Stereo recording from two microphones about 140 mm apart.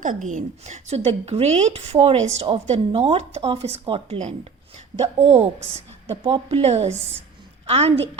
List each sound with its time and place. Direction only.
0.0 s a woman's voice: 65° right (ahead or behind); by 8.2 s 45° right (ahead or behind)